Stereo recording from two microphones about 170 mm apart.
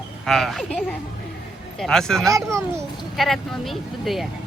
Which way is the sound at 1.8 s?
5° left (ahead or behind).